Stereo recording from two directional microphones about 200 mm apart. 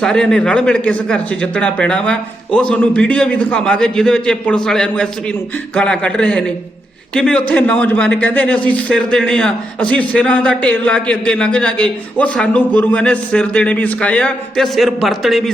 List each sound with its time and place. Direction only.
0.0 s speech: 5° left (ahead or behind)